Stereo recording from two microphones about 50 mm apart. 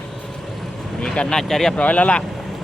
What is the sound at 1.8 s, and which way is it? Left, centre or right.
Speech, left.